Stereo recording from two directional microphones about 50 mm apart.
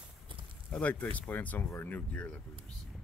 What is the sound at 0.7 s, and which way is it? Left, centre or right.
Speech, centre.